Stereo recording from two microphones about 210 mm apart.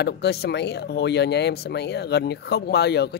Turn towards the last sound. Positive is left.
turn(degrees=50)  # may be behind; listen again after turning